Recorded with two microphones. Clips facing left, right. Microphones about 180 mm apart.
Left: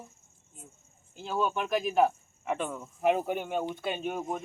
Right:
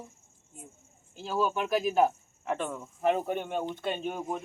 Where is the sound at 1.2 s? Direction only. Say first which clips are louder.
Right 1 dB; 5° right (ahead or behind).